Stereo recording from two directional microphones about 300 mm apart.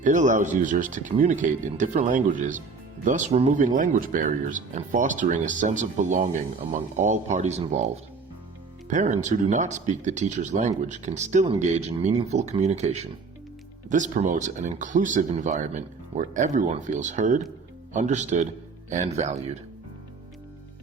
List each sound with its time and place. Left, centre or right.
0.0 s speech: right
8.9 s speech: right